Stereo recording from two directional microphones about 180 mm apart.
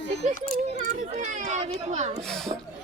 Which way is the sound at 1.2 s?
40° right (ahead or behind).